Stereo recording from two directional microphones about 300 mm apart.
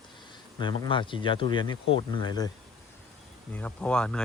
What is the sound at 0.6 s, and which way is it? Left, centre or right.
Speech, centre.